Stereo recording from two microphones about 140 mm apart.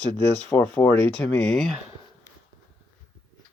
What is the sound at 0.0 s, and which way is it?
Speech, 10° left (ahead or behind).